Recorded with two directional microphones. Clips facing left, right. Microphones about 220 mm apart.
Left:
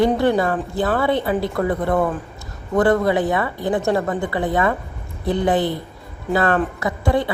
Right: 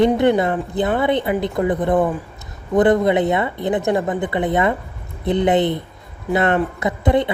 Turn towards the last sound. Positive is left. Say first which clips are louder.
# right 2 dB
turn(degrees=-20)  # may be behind; listen again after turning